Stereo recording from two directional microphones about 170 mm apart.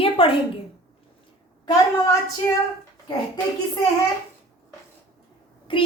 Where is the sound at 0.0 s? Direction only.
30° left (ahead or behind).